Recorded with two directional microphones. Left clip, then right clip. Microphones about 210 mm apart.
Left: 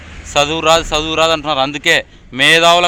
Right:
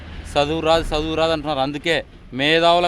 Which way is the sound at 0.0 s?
30° left (ahead or behind).